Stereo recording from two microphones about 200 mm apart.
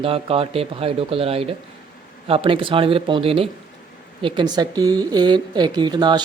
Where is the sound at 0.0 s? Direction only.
30° right (ahead or behind).